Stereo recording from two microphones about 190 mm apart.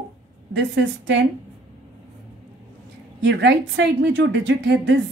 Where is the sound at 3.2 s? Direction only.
65° right (ahead or behind).